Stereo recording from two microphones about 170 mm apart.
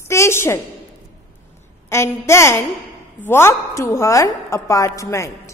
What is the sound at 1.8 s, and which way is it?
A woman's voice, 15° left (ahead or behind).